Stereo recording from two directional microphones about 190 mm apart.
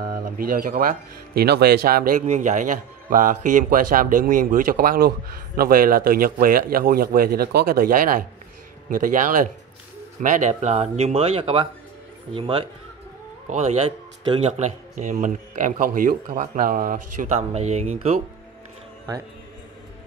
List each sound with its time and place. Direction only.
0.0 s speech: 50° right (ahead or behind); by 12.6 s 30° right (ahead or behind)
14.2 s speech: 25° right (ahead or behind)
15.0 s speech: 40° right (ahead or behind)